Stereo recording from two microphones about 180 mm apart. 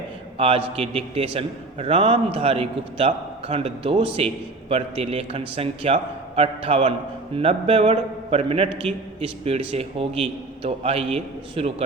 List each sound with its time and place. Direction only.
0.3 s a man's voice: 35° right (ahead or behind)